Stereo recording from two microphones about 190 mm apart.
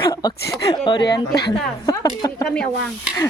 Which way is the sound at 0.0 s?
20° left (ahead or behind).